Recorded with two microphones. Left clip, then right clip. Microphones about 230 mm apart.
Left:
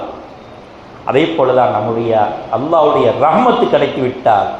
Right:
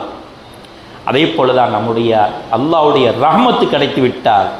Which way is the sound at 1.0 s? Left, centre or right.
Right.